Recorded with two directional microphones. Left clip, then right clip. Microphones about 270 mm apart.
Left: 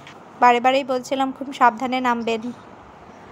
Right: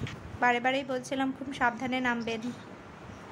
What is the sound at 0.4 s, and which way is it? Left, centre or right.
A woman's voice, centre.